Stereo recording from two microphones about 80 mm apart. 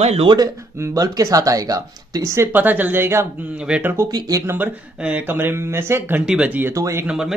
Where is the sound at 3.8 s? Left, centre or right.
Right.